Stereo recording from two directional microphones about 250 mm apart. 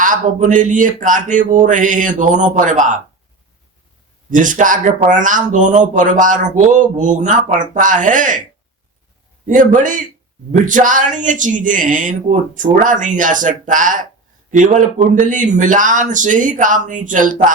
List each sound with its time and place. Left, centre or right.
0.0 s speech: right
4.3 s speech: right
9.5 s speech: right